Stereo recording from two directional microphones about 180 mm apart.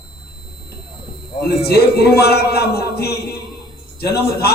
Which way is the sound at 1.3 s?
60° left (ahead or behind).